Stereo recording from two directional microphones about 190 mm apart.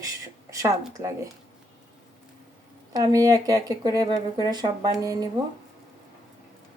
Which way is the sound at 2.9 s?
20° right (ahead or behind).